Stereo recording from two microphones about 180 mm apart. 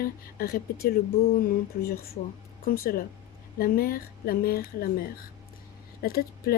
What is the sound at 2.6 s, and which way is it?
Speech, 55° left (ahead or behind).